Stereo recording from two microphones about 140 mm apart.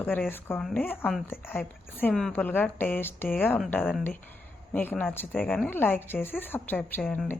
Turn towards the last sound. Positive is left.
turn(degrees=10)  # may be behind; listen again after turning